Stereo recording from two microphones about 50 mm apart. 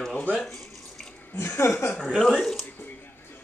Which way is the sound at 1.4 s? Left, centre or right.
Left.